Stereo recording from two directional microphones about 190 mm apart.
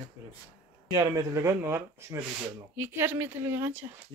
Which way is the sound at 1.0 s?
15° right (ahead or behind).